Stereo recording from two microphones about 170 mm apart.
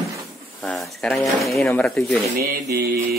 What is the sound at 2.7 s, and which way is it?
Mantra, 65° right (ahead or behind).